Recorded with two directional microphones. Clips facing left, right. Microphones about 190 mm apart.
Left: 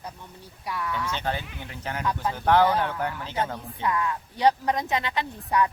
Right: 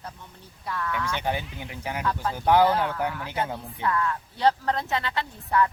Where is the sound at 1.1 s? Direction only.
15° right (ahead or behind).